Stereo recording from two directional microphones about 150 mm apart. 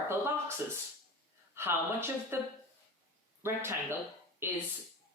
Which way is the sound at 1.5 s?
15° right (ahead or behind).